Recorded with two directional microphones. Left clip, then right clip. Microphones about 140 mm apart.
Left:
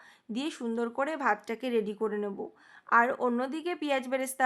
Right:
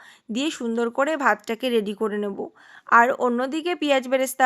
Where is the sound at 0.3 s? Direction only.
35° right (ahead or behind).